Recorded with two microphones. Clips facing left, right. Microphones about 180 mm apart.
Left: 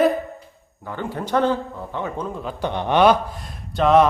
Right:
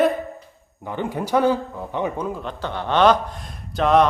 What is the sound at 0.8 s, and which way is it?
A man's voice, 20° right (ahead or behind).